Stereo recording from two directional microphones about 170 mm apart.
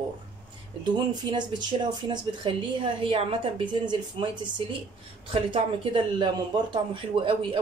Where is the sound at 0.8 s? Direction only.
25° right (ahead or behind).